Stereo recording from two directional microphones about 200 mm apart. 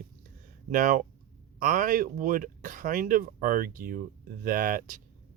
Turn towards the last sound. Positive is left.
turn(degrees=-45)  # may be behind; listen again after turning